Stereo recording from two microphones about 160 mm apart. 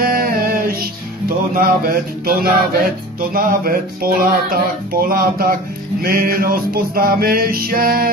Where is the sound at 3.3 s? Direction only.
65° right (ahead or behind).